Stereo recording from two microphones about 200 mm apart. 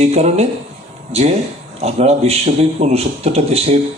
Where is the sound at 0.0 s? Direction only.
35° right (ahead or behind).